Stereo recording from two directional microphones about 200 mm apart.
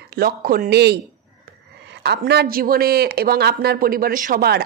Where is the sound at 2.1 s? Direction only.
50° right (ahead or behind).